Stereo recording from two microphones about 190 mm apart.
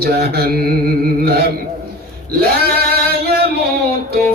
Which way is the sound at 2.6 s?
55° right (ahead or behind).